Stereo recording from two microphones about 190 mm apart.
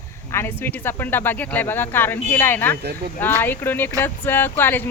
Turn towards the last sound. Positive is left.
turn(degrees=10)  # may be behind; listen again after turning